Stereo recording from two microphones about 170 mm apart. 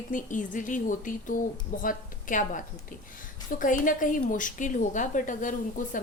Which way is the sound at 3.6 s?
50° left (ahead or behind).